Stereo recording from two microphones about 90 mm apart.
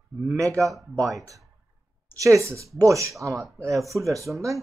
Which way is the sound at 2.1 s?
35° right (ahead or behind).